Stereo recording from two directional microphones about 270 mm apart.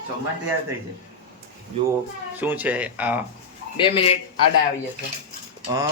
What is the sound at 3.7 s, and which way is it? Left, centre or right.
Speech, centre.